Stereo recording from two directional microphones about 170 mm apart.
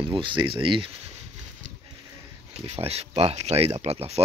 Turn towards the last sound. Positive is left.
turn(degrees=-40)  # may be behind; listen again after turning